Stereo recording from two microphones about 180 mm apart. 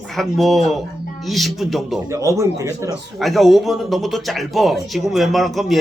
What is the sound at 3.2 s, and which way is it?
Speech, centre (ahead or behind).